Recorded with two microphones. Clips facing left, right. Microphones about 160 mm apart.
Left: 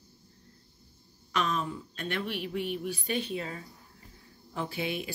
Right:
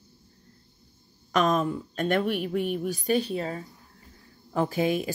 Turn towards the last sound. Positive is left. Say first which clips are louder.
# right 9 dB
turn(degrees=-40)  # may be behind; listen again after turning